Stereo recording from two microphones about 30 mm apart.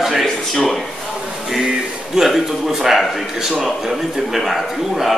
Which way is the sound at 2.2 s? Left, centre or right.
Centre.